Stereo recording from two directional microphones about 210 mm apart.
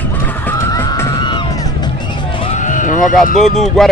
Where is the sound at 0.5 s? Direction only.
15° left (ahead or behind).